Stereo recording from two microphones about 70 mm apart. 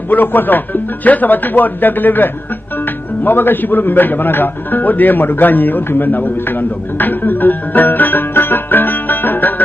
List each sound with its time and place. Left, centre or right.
0.1 s a man's voice: left
7.0 s music: left